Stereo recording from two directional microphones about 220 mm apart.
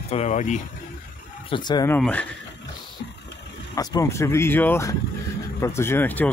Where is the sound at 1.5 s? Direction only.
20° left (ahead or behind).